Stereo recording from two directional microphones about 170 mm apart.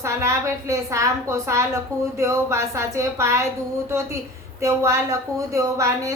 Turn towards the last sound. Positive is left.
turn(degrees=-20)  # may be behind; listen again after turning